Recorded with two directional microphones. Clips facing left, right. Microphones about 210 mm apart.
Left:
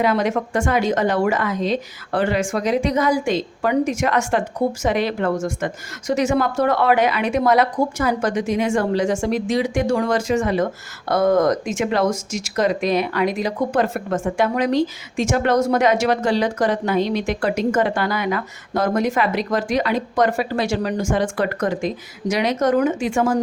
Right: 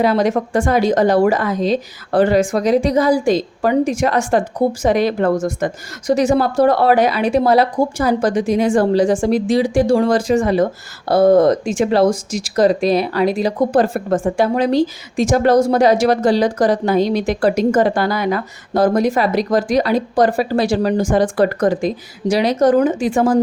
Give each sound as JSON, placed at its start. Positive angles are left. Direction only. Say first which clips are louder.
{"t": 0.0, "sound": "speech", "louder": "right 4 dB", "side_deg": -35}